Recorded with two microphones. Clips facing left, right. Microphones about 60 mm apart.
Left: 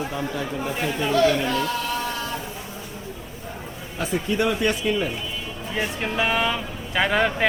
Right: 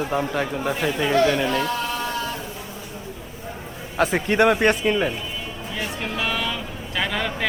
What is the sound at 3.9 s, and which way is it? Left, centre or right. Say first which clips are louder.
Speech: right 5 dB; right.